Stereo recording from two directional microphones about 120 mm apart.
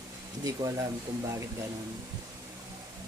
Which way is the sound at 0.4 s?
30° right (ahead or behind).